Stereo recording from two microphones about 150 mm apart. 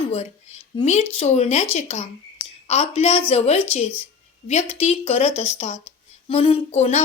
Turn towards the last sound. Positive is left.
turn(degrees=45)  # may be behind; listen again after turning